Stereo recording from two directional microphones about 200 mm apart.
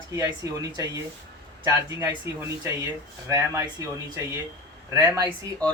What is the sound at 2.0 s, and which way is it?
Speech, 15° right (ahead or behind).